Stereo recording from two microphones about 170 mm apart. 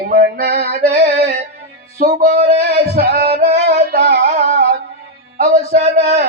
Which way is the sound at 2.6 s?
70° right (ahead or behind).